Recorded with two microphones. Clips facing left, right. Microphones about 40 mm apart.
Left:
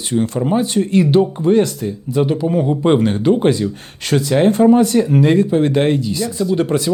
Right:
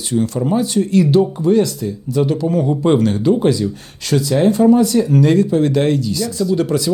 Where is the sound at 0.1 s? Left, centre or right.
Left.